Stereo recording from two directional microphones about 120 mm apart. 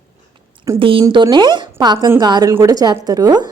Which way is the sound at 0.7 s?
45° right (ahead or behind).